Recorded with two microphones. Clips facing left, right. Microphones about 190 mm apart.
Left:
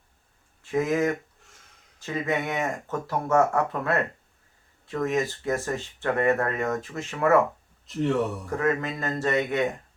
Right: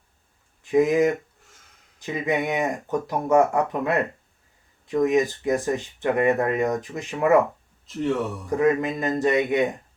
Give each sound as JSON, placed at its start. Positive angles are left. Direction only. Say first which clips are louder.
{"t": 0.6, "sound": "speech", "louder": "right 5 dB", "side_deg": -15}
{"t": 7.9, "sound": "speech", "louder": "even", "side_deg": 0}
{"t": 8.4, "sound": "speech", "louder": "right 5 dB", "side_deg": -15}